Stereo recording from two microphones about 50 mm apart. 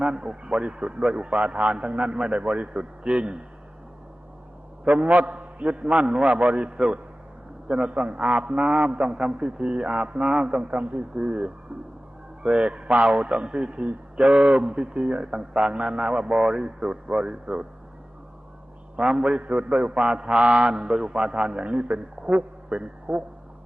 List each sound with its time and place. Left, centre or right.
0.0 s a man's voice: centre
4.9 s a man's voice: right
18.9 s a man's voice: centre
19.4 s a man's voice: right